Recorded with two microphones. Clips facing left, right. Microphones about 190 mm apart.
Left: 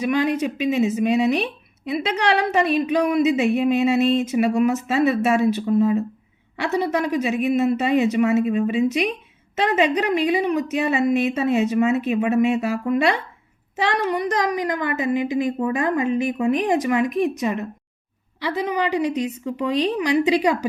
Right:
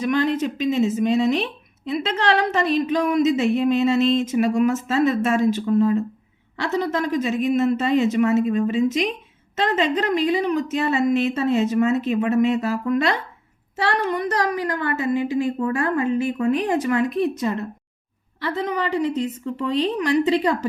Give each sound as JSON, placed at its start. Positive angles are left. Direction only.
{"t": 0.0, "sound": "a woman's voice", "side_deg": 15}